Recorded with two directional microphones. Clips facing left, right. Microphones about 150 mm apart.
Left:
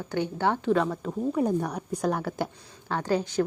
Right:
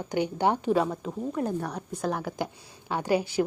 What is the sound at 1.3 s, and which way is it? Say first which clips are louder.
Speech: left 4 dB; 10° left (ahead or behind).